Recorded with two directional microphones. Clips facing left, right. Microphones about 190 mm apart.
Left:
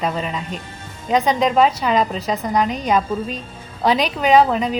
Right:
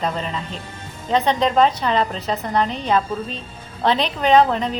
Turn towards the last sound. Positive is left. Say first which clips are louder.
# left 1 dB
turn(degrees=5)  # may be behind; listen again after turning